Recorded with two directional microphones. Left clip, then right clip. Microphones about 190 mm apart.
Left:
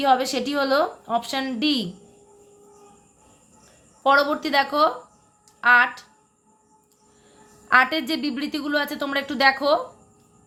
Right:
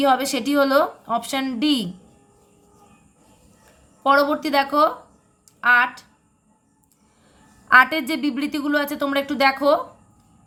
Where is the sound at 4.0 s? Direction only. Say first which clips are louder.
Right 1 dB; 15° right (ahead or behind).